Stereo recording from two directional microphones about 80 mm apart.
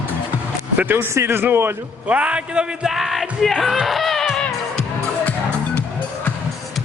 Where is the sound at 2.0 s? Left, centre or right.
Centre.